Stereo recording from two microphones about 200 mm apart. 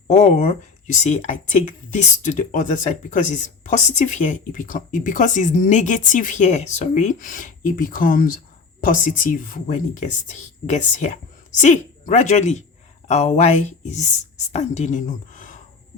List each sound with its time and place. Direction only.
0.1 s speech: 35° left (ahead or behind)